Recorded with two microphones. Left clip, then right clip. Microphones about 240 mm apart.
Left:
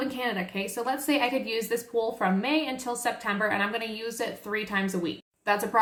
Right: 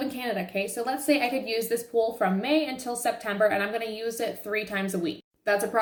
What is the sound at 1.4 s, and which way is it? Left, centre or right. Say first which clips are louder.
Speech: right 1 dB; centre.